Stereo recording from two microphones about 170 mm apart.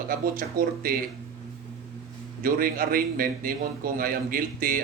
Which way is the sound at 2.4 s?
55° right (ahead or behind).